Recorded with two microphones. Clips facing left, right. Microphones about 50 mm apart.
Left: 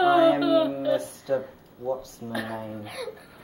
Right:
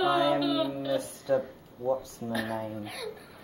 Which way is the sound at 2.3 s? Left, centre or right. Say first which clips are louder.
Even; centre.